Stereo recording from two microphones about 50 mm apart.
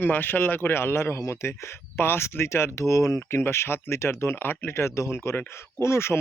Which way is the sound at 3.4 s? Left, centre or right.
Left.